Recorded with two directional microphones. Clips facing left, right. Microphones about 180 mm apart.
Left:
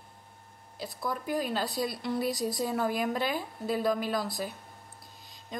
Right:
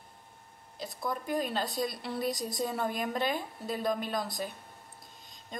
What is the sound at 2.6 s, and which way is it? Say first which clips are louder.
A woman's voice: left 3 dB; 5° left (ahead or behind).